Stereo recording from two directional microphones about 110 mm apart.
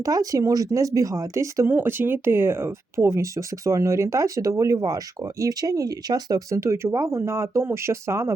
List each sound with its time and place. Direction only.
0.0 s speech: 30° right (ahead or behind)